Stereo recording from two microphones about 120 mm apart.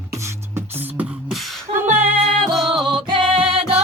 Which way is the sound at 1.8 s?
15° right (ahead or behind).